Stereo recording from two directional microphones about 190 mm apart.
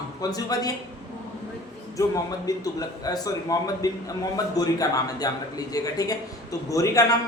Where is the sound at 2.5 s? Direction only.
20° left (ahead or behind).